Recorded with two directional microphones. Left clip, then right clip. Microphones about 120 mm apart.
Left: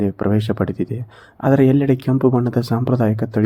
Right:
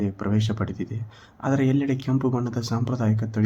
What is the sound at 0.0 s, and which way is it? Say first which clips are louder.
Speech: left 8 dB; 35° left (ahead or behind).